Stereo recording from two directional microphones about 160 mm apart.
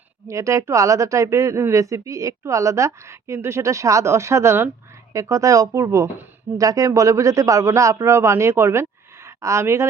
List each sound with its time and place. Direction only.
0.3 s speech: 20° right (ahead or behind)